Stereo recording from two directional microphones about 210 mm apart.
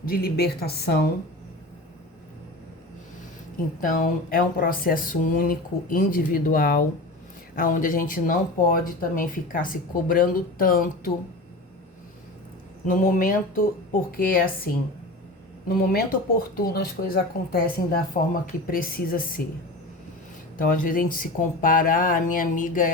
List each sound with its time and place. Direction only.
0.0 s speech: 45° left (ahead or behind)
3.8 s speech: 40° left (ahead or behind)
12.8 s speech: 40° left (ahead or behind)
20.6 s speech: 40° left (ahead or behind)